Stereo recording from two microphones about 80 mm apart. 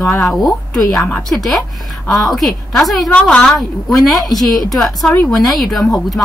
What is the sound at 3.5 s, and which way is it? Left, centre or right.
Speech, centre.